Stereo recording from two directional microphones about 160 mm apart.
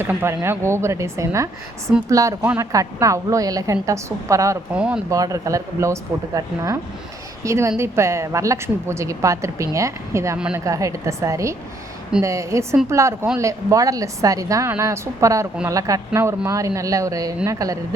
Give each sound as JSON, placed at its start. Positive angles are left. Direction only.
{"t": 0.0, "sound": "a woman's voice", "side_deg": -15}
{"t": 4.7, "sound": "a woman's voice", "side_deg": -10}
{"t": 5.0, "sound": "a woman's voice", "side_deg": -20}